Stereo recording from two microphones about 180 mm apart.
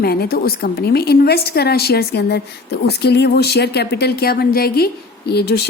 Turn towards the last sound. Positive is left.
turn(degrees=65)  # may be behind; listen again after turning